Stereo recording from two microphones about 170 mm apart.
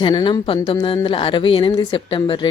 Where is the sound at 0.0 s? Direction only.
30° left (ahead or behind).